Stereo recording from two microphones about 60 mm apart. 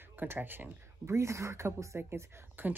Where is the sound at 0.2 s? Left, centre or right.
Right.